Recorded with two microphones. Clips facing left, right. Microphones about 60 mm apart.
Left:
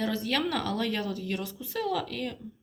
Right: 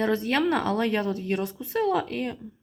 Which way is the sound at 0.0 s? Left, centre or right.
Right.